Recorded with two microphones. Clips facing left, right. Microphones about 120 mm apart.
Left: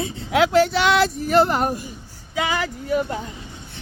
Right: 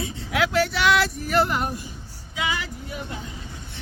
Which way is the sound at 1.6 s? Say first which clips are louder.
Left 5 dB; 45° left (ahead or behind).